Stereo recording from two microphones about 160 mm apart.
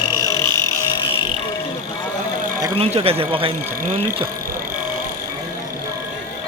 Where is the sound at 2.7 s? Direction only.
35° right (ahead or behind).